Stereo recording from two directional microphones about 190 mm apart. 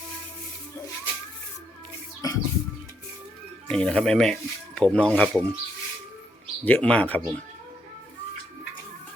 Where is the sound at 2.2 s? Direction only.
20° left (ahead or behind).